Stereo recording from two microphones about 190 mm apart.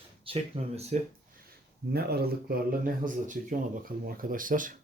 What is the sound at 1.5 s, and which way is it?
A man's voice, 55° right (ahead or behind).